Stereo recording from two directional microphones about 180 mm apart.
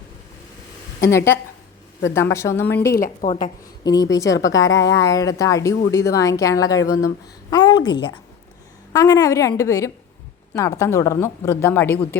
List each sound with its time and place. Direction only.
1.0 s speech: 15° left (ahead or behind)
2.9 s a woman's voice: 45° left (ahead or behind)
3.8 s a woman's voice: 20° left (ahead or behind)
4.3 s a woman's voice: 90° left
5.0 s a woman's voice: 20° left (ahead or behind)